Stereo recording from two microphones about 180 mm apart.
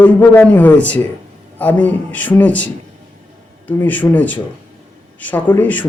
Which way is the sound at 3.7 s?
10° left (ahead or behind).